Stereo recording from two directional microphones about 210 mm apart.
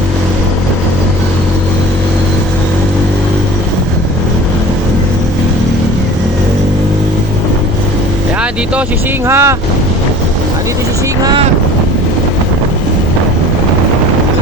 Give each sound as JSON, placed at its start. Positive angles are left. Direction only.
{"t": 9.2, "sound": "speech", "side_deg": -15}
{"t": 11.2, "sound": "speech", "side_deg": -20}